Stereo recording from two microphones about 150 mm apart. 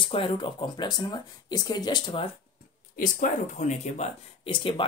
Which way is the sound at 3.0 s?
55° left (ahead or behind).